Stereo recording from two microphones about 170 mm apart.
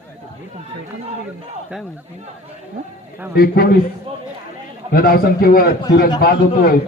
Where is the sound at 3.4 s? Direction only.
65° left (ahead or behind).